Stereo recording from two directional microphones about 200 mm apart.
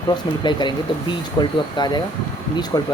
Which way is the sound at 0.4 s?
20° left (ahead or behind).